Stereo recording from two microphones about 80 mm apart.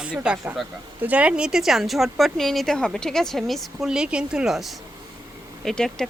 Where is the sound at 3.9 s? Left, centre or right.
Centre.